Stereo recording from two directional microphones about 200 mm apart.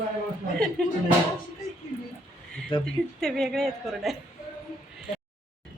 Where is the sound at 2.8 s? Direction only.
5° left (ahead or behind).